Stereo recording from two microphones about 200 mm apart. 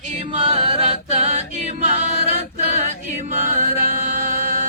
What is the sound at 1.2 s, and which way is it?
Choir, 35° right (ahead or behind).